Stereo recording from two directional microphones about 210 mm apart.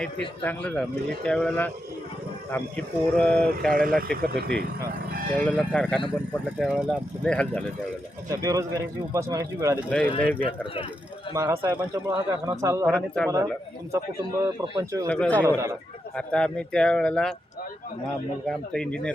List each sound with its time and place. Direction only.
0.0 s speech: 5° left (ahead or behind)
3.7 s speech: 40° right (ahead or behind)
5.3 s speech: 5° left (ahead or behind)
6.7 s speech: 5° right (ahead or behind)
7.3 s speech: 5° left (ahead or behind)
8.3 s speech: 15° right (ahead or behind)
9.9 s speech: 5° left (ahead or behind)
11.3 s speech: 15° right (ahead or behind)
12.8 s speech: 5° left (ahead or behind)
13.9 s speech: 15° right (ahead or behind)
15.0 s speech: 5° left (ahead or behind)
15.4 s speech: 10° right (ahead or behind)
16.1 s speech: 5° left (ahead or behind)
18.4 s speech: 5° left (ahead or behind)